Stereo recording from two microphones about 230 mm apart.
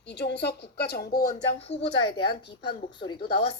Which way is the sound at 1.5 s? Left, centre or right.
Left.